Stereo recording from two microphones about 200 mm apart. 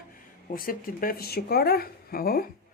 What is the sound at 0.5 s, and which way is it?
Speech, 45° left (ahead or behind).